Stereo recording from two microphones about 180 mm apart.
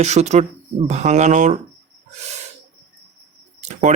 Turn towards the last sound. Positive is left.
turn(degrees=-40)  # may be behind; listen again after turning